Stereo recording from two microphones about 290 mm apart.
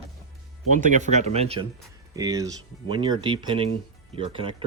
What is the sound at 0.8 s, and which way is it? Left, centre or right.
Speech, right.